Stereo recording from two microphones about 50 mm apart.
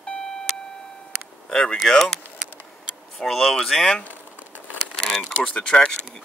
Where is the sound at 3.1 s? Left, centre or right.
Centre.